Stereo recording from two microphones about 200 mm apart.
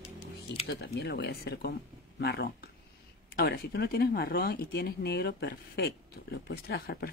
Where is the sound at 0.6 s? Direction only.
55° left (ahead or behind).